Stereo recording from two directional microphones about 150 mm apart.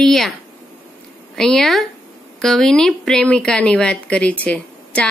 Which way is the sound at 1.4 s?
5° left (ahead or behind).